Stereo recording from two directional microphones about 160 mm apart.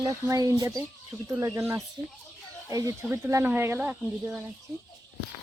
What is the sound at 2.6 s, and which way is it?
Speech, 20° right (ahead or behind).